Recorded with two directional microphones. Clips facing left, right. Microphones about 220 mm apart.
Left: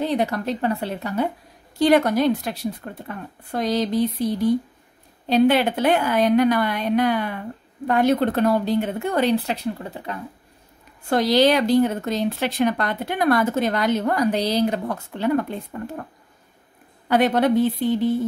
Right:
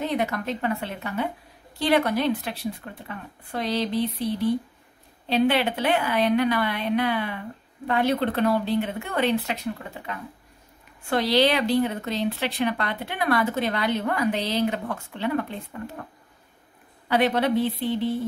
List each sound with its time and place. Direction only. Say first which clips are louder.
0.0 s a woman's voice: left 4 dB; 35° left (ahead or behind)
17.1 s a woman's voice: left 4 dB; 45° left (ahead or behind)